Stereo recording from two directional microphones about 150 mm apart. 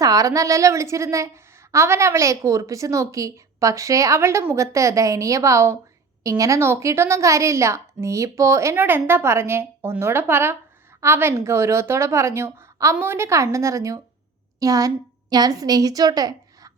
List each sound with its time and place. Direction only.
0.0 s a woman's voice: 25° right (ahead or behind)